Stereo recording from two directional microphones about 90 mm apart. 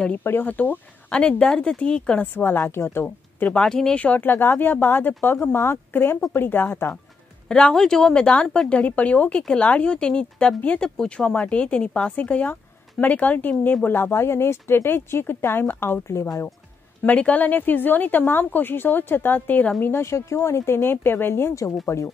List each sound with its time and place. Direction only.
0.2 s speech: 20° left (ahead or behind)
2.3 s speech: 25° left (ahead or behind)
7.4 s speech: 10° left (ahead or behind); by 16.5 s 35° left (ahead or behind)
17.0 s speech: 15° left (ahead or behind); by 22.1 s 35° left (ahead or behind)